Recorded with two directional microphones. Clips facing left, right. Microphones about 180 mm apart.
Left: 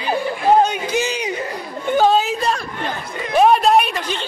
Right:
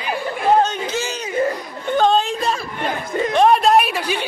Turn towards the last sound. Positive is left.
turn(degrees=-10)  # may be behind; listen again after turning